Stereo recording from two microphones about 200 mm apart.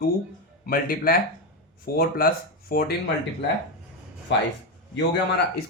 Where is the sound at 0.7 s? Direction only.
45° left (ahead or behind).